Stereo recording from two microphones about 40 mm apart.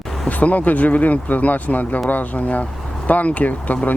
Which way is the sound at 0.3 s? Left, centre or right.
Left.